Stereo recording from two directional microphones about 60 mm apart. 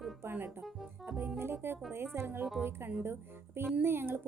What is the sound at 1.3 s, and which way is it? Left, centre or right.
A woman's voice, right.